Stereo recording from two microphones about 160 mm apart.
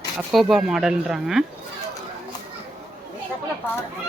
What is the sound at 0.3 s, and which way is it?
Speech, centre (ahead or behind).